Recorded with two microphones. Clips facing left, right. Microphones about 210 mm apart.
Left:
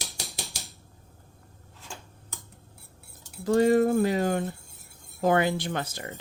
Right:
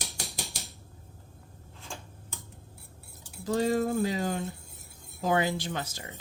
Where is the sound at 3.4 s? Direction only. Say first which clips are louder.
Left 6 dB; 60° left (ahead or behind).